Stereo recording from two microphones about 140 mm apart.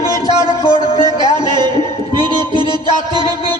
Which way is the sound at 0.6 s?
30° right (ahead or behind).